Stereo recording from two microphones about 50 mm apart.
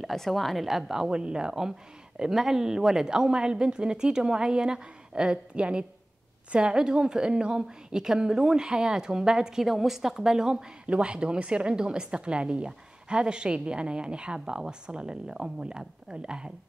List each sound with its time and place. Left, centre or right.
0.1 s a woman's voice: centre